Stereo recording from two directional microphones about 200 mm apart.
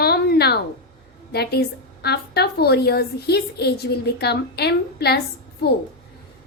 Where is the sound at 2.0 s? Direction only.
55° left (ahead or behind).